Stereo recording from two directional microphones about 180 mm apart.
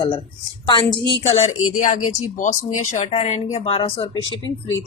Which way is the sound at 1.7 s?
45° left (ahead or behind).